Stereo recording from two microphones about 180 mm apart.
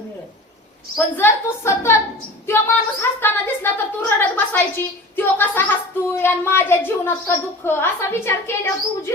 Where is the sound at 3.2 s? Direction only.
10° left (ahead or behind).